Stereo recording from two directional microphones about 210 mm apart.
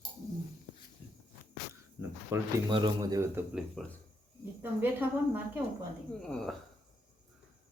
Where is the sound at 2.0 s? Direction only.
15° right (ahead or behind).